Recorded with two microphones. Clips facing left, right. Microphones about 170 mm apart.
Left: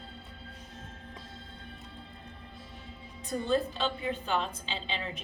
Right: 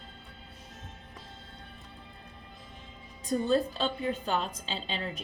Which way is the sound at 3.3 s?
40° right (ahead or behind).